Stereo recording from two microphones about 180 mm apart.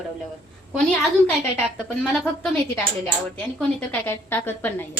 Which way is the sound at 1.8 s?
10° left (ahead or behind).